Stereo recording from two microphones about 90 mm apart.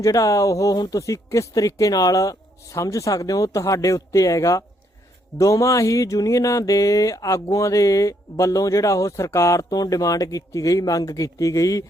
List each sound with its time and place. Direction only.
0.0 s speech: 40° left (ahead or behind)